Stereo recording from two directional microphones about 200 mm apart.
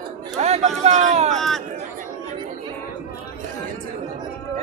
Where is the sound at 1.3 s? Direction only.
Centre (ahead or behind).